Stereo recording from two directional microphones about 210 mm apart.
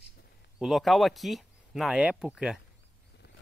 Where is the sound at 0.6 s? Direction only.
Centre (ahead or behind).